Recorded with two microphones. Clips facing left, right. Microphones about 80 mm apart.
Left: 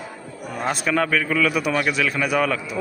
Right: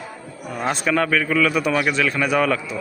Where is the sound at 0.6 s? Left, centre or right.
Centre.